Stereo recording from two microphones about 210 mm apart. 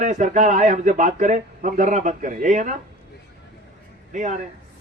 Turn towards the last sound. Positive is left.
turn(degrees=-35)  # may be behind; listen again after turning